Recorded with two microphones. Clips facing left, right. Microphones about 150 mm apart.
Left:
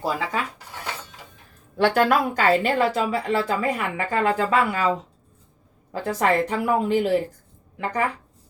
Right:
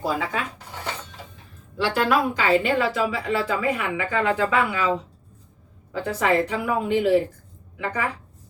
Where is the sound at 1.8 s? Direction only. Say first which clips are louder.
Left 2 dB; 50° left (ahead or behind).